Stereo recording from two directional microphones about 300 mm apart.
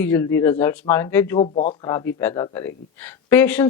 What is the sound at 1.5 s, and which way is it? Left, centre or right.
Speech, left.